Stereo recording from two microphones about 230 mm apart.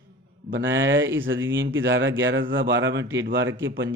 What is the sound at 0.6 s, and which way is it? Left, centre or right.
A man's voice, right.